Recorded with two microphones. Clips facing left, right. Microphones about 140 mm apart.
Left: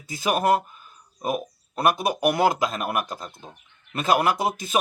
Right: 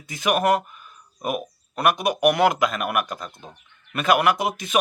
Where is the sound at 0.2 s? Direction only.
30° left (ahead or behind).